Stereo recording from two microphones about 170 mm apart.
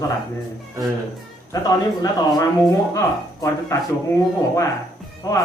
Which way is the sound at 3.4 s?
20° left (ahead or behind).